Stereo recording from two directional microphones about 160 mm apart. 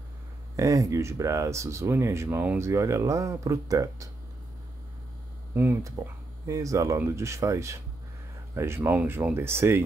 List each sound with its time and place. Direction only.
0.6 s speech: 20° right (ahead or behind)
5.5 s speech: 15° right (ahead or behind)